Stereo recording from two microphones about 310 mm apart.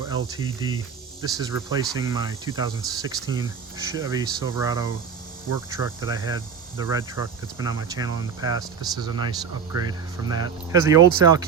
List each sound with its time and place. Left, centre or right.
0.3 s speech: centre